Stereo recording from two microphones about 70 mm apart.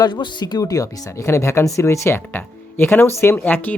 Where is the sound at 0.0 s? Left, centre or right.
Left.